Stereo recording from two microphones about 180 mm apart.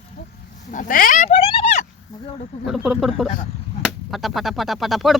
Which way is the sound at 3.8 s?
Centre (ahead or behind).